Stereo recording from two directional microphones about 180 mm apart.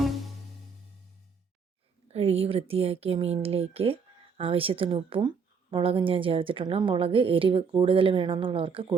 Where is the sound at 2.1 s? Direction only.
35° right (ahead or behind).